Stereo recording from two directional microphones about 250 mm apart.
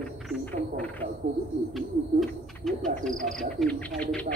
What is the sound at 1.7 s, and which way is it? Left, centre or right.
Bird, centre.